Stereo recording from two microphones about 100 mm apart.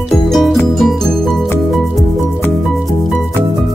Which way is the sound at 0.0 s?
Centre (ahead or behind).